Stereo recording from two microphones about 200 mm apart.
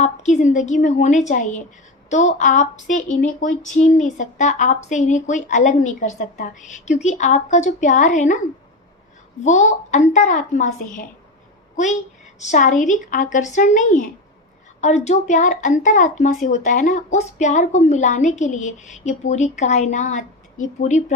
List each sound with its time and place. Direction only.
0.0 s speech: 35° left (ahead or behind)
9.4 s speech: 35° left (ahead or behind)
12.4 s speech: 35° left (ahead or behind)